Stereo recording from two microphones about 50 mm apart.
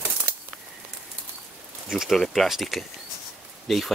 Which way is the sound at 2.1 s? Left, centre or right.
Centre.